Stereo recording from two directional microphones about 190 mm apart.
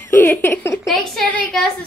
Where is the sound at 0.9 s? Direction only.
Centre (ahead or behind).